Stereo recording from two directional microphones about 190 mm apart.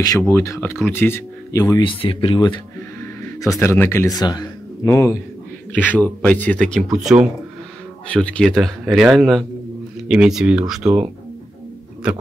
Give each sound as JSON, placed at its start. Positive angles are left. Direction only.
{"t": 0.3, "sound": "speech", "side_deg": 15}